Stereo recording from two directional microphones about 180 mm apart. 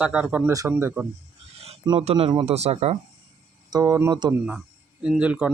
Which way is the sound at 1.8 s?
25° right (ahead or behind).